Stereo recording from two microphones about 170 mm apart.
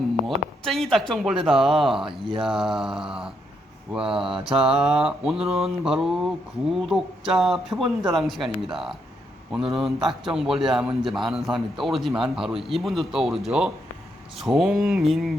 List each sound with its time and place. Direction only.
0.3 s mantra: centre (ahead or behind)